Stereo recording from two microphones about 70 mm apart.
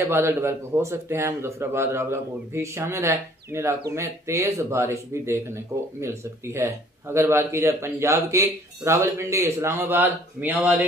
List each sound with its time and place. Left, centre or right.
0.0 s a man's voice: right